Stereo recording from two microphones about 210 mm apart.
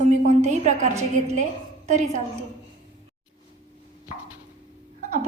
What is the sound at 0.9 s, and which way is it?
Speech, 15° right (ahead or behind).